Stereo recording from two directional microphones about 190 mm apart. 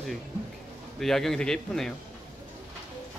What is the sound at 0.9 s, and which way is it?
Speech, centre (ahead or behind).